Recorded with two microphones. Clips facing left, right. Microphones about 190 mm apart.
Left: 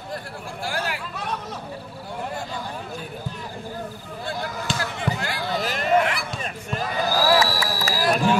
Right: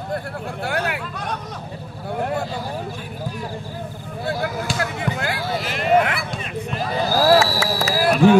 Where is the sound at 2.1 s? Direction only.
60° right (ahead or behind).